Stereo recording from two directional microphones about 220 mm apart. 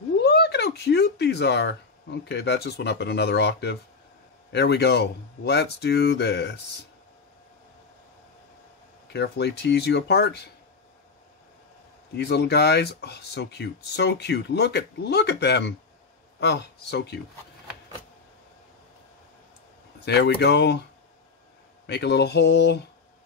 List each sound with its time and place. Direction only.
0.2 s speech: 50° left (ahead or behind)
9.0 s speech: 50° left (ahead or behind)
12.2 s speech: 50° left (ahead or behind)
20.1 s speech: 50° left (ahead or behind)
21.8 s speech: 50° left (ahead or behind)